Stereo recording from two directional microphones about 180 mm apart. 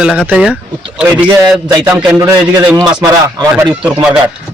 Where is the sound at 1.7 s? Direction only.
20° right (ahead or behind).